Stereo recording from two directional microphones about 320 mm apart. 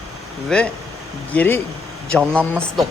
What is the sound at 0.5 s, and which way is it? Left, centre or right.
Speech, centre.